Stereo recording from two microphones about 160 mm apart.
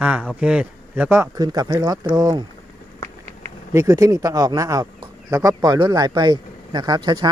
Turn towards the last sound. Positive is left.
turn(degrees=-25)  # may be behind; listen again after turning